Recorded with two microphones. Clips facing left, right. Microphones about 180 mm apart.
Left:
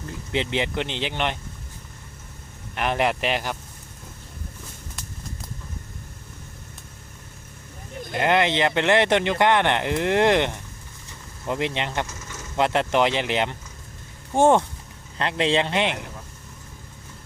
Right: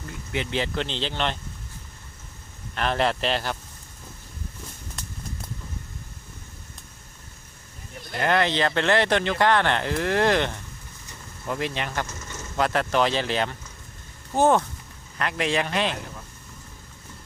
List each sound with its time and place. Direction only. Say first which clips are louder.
0.1 s speech: left 3 dB; 25° left (ahead or behind)
2.7 s speech: left 1 dB; 15° left (ahead or behind)
8.1 s speech: left 2 dB; 20° left (ahead or behind)